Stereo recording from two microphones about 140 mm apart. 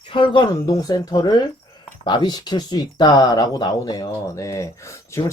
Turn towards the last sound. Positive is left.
turn(degrees=20)  # may be behind; listen again after turning